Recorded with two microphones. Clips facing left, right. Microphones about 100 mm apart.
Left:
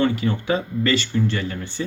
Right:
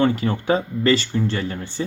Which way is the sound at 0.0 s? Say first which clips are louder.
Right 1 dB; 40° right (ahead or behind).